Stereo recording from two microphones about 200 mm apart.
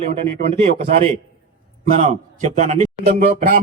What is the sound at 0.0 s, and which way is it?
A man's voice, 40° right (ahead or behind).